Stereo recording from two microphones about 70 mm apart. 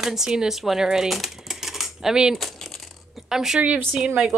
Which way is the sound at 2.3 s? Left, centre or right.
Centre.